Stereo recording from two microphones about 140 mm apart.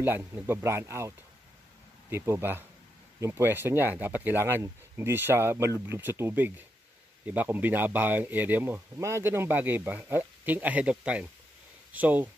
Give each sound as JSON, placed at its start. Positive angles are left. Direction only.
{"t": 0.0, "sound": "speech", "side_deg": -15}